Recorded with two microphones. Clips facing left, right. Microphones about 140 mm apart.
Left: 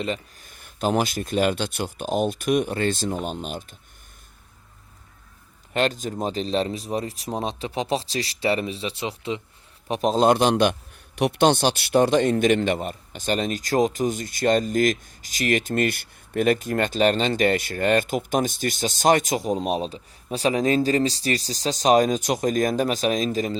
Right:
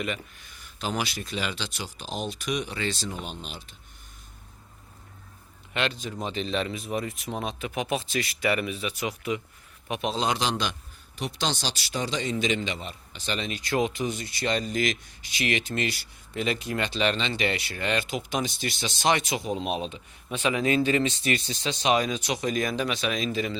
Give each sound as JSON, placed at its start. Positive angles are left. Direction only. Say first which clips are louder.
{"t": 0.0, "sound": "speech", "louder": "left 4 dB", "side_deg": 30}
{"t": 0.4, "sound": "a man's voice", "louder": "left 9 dB", "side_deg": 50}
{"t": 5.7, "sound": "speech", "louder": "left 6 dB", "side_deg": 40}
{"t": 9.9, "sound": "a man's voice", "louder": "left 9 dB", "side_deg": 40}